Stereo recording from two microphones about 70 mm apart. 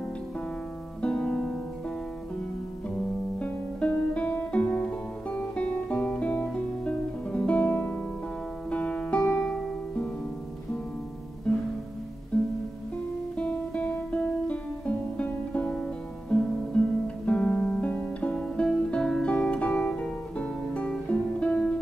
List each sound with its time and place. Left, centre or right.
1.0 s music: centre
3.3 s music: centre
12.3 s music: centre